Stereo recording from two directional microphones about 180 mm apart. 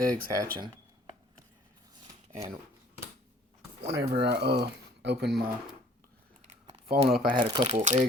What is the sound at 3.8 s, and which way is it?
Speech, 65° right (ahead or behind).